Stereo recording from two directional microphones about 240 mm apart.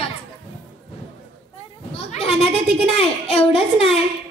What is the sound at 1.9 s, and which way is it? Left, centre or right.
A woman's voice, left.